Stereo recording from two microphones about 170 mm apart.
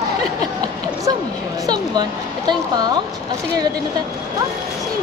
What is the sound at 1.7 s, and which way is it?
A woman's voice, 25° right (ahead or behind).